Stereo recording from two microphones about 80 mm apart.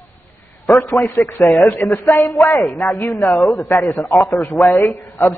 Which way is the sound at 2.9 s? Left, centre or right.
Left.